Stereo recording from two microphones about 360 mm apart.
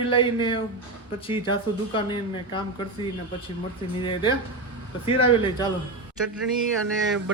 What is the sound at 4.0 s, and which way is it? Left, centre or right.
Speech, centre.